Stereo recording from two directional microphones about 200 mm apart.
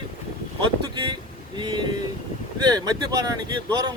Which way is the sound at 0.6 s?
25° right (ahead or behind).